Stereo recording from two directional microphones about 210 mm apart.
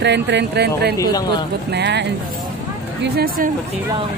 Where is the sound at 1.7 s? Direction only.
55° right (ahead or behind).